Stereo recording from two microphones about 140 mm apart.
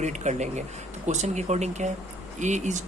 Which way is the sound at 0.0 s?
55° right (ahead or behind).